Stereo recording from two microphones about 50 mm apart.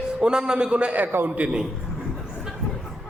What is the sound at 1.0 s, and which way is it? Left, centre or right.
Speech, right.